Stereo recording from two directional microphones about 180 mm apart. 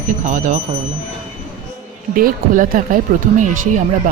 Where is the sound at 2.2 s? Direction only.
50° right (ahead or behind).